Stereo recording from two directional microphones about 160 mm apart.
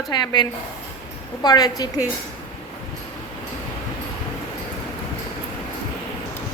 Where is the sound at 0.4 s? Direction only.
30° left (ahead or behind).